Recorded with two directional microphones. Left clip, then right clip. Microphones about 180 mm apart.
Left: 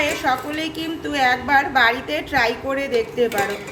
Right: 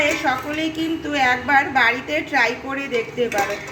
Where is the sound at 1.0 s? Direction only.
5° left (ahead or behind).